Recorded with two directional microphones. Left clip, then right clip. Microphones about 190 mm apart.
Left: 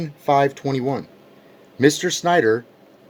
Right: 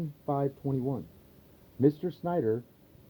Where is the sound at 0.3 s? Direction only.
30° left (ahead or behind).